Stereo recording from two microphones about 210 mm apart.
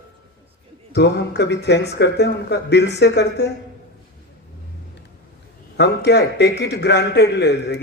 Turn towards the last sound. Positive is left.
turn(degrees=55)  # may be behind; listen again after turning